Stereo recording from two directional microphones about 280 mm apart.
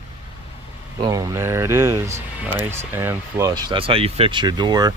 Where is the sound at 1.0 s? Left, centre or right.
Centre.